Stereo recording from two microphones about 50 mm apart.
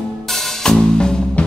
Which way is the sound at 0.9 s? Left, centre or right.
Centre.